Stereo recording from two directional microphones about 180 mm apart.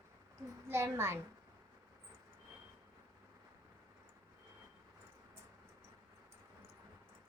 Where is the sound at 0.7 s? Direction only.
15° right (ahead or behind).